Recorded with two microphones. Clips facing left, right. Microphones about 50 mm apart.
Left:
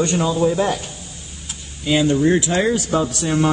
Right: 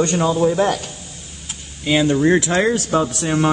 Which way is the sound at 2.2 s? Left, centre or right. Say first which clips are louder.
Right 1 dB; right.